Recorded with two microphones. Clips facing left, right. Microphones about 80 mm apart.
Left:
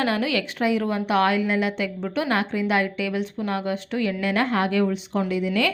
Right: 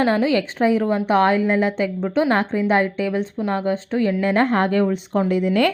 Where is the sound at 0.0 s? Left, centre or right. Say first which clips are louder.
Right 5 dB; right.